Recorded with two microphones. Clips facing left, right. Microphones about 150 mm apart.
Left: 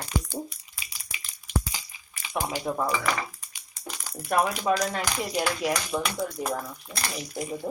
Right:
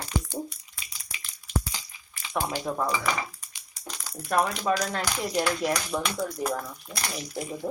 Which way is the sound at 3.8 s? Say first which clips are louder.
Left 1 dB; 10° left (ahead or behind).